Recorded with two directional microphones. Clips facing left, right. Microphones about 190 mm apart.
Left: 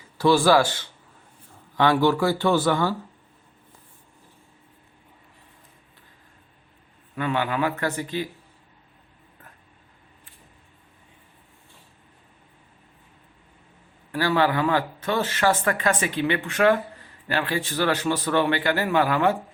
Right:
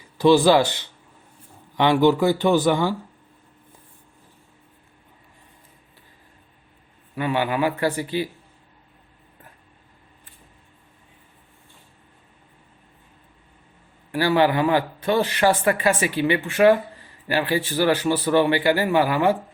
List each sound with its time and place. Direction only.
0.2 s speech: 20° right (ahead or behind)
7.2 s a man's voice: 10° right (ahead or behind)
14.1 s a man's voice: 15° right (ahead or behind)